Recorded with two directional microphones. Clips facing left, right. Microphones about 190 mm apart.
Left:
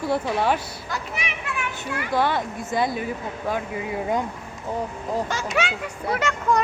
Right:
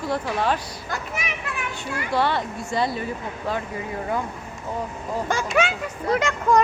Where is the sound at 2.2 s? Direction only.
15° left (ahead or behind).